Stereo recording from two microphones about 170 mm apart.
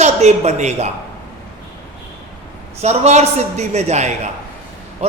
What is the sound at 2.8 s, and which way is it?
A woman's voice, 40° right (ahead or behind).